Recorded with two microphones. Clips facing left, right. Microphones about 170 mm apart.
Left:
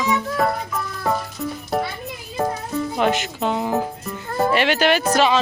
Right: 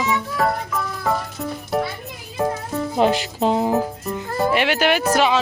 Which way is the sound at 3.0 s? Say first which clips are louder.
Right 4 dB; 35° right (ahead or behind).